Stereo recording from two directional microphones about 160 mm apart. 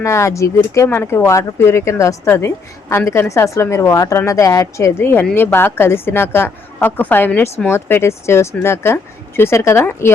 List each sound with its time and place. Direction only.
0.0 s a woman's voice: 20° left (ahead or behind)